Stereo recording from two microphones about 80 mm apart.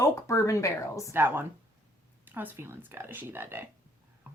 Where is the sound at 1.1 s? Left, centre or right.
Right.